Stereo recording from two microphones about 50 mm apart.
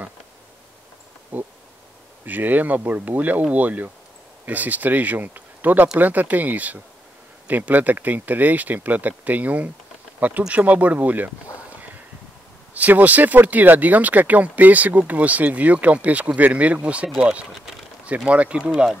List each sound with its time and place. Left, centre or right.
1.3 s speech: right
12.7 s speech: right